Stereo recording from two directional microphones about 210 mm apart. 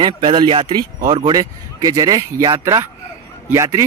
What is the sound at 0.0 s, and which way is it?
Speech, 25° right (ahead or behind).